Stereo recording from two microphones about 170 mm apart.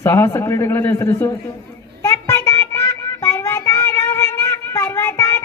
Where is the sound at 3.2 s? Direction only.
15° left (ahead or behind).